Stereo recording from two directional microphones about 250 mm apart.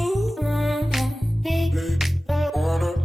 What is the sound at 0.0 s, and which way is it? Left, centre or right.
Music, centre.